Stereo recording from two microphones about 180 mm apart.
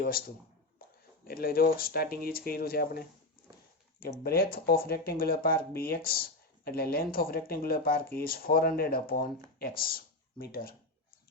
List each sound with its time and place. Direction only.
0.0 s speech: 55° left (ahead or behind)
0.8 s a sound: 55° left (ahead or behind)
1.2 s speech: 55° left (ahead or behind)
4.0 s speech: 55° left (ahead or behind)